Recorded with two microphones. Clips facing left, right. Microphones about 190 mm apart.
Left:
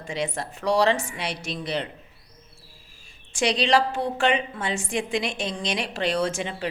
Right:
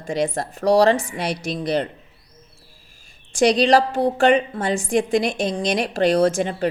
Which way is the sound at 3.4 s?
40° right (ahead or behind).